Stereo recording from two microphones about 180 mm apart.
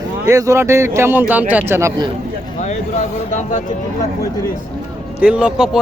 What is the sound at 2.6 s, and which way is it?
Speech, 40° left (ahead or behind).